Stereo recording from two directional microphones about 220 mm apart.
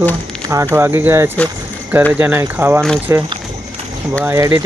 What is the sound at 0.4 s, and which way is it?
Speech, 15° right (ahead or behind).